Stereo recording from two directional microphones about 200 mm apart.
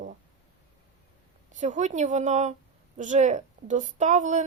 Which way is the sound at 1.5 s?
35° right (ahead or behind).